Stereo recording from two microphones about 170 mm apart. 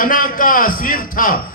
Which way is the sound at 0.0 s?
55° left (ahead or behind).